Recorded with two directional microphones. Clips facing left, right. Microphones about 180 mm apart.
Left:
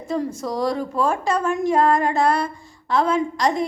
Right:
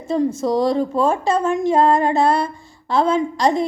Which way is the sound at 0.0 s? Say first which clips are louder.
Right 6 dB; 25° right (ahead or behind).